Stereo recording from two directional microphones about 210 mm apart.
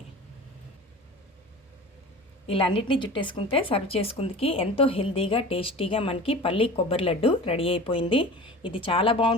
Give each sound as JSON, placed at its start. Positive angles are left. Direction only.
{"t": 2.5, "sound": "a woman's voice", "side_deg": 25}